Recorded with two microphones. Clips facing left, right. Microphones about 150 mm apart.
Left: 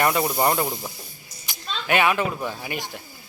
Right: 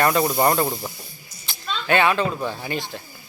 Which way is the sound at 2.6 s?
15° left (ahead or behind).